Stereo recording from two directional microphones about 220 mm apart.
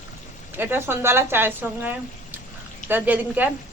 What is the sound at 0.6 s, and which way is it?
Speech, 10° right (ahead or behind).